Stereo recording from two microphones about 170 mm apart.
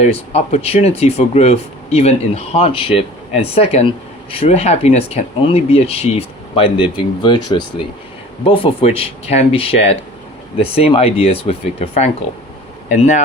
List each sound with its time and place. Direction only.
0.0 s speech: 40° left (ahead or behind)
8.4 s speech: 35° left (ahead or behind)
12.9 s speech: 45° left (ahead or behind)